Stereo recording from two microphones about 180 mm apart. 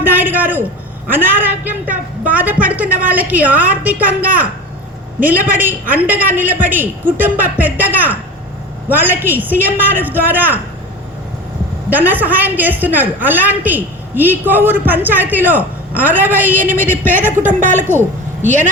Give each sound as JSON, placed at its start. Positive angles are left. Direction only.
{"t": 0.0, "sound": "a sound", "side_deg": -10}
{"t": 1.1, "sound": "a woman's voice", "side_deg": -10}
{"t": 11.9, "sound": "a woman's voice", "side_deg": -10}
{"t": 17.4, "sound": "a woman's voice", "side_deg": -45}